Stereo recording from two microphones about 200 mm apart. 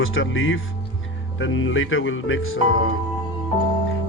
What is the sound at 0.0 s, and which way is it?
Speech, 80° left.